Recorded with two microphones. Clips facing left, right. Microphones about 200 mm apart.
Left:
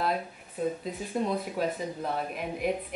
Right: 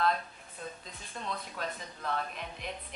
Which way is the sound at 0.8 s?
5° left (ahead or behind).